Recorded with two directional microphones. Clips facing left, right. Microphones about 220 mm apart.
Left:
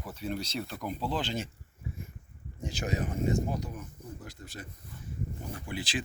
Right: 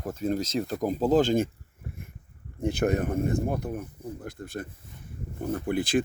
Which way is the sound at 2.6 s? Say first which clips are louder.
Right 8 dB; 60° right (ahead or behind).